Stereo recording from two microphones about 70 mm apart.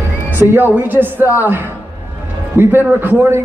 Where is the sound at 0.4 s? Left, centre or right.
Right.